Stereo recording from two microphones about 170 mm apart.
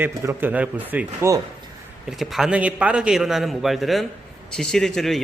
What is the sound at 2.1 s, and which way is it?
A man's voice, centre (ahead or behind).